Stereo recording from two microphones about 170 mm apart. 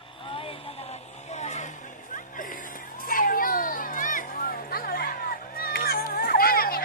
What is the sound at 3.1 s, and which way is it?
Children playing, 55° left (ahead or behind).